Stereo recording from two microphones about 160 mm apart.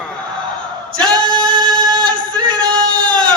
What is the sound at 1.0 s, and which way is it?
Singing, 25° right (ahead or behind).